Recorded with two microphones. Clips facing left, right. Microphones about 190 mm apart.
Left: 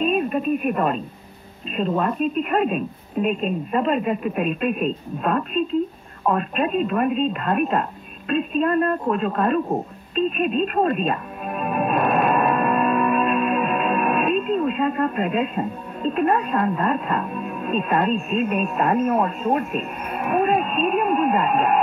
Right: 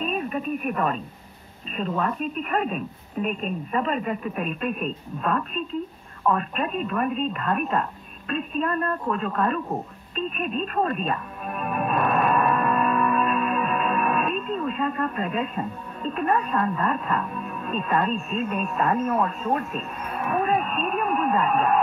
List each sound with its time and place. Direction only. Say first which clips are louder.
0.0 s radio: left 6 dB; 20° left (ahead or behind)
0.7 s speech: left 4 dB; 20° left (ahead or behind)
10.4 s music: left 3 dB; 20° left (ahead or behind)